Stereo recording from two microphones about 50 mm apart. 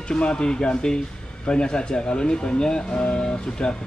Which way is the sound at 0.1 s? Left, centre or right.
Centre.